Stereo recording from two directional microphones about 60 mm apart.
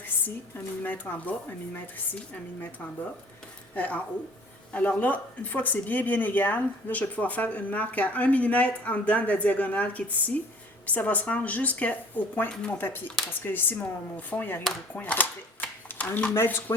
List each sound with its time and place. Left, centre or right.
0.0 s speech: left
3.8 s speech: left
14.9 s a sound: left
16.3 s speech: left